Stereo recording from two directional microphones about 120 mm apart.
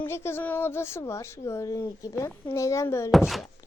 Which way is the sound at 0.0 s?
20° left (ahead or behind).